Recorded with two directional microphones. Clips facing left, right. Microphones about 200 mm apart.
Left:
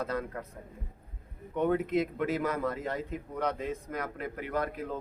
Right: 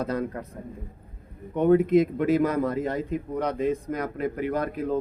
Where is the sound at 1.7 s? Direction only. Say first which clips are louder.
Right 10 dB; 20° right (ahead or behind).